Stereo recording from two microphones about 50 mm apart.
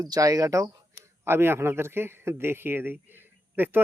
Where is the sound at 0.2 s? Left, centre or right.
Right.